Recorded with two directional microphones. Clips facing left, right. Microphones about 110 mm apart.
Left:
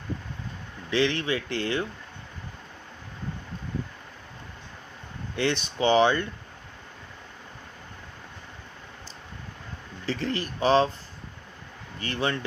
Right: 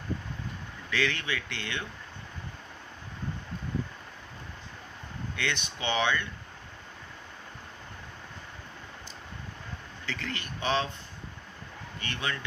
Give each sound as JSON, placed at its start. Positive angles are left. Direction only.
{"t": 0.9, "sound": "speech", "side_deg": 30}
{"t": 5.4, "sound": "speech", "side_deg": 35}
{"t": 10.1, "sound": "speech", "side_deg": 35}
{"t": 11.9, "sound": "speech", "side_deg": 35}